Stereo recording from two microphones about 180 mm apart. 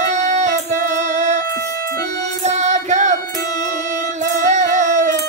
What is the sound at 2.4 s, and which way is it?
Music, 40° right (ahead or behind).